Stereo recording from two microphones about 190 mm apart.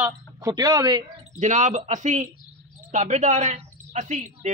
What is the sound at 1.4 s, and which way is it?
Speech, 40° right (ahead or behind).